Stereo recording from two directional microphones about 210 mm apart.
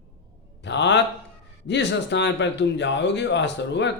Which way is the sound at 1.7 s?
55° left (ahead or behind).